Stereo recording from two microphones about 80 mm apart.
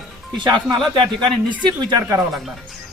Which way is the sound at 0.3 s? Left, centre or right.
Right.